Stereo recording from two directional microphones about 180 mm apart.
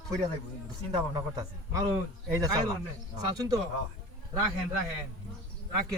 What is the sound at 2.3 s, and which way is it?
A man's voice, 20° right (ahead or behind).